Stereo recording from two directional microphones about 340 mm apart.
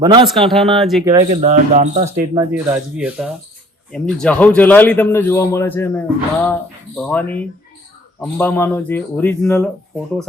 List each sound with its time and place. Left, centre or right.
0.0 s speech: centre
0.3 s a man's voice: centre
1.2 s speech: right
2.1 s a man's voice: centre